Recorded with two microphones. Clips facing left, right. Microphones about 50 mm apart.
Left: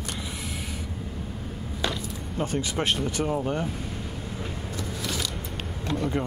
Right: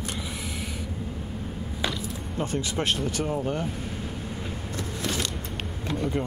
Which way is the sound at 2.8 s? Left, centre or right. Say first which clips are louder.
Left 1 dB; centre.